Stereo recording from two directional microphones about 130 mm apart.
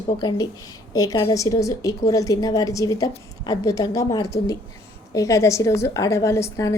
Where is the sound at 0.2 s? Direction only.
35° left (ahead or behind).